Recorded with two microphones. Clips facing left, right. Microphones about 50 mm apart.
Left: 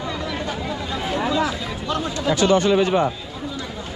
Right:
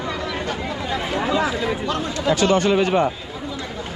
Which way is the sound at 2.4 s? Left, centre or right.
Right.